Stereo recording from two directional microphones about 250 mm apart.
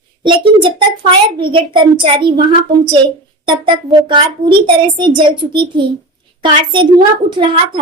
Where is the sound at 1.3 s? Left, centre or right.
Centre.